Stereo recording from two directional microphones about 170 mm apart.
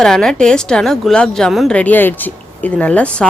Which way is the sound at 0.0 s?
5° left (ahead or behind).